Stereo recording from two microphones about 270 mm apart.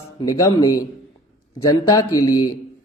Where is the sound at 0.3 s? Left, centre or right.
Centre.